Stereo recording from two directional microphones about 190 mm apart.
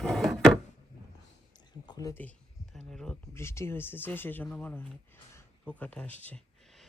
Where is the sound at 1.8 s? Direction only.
20° left (ahead or behind).